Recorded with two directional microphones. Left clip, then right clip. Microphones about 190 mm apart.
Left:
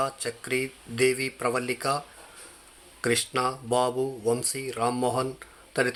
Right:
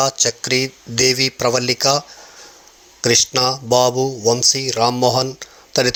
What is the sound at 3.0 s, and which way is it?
Speech, 30° right (ahead or behind).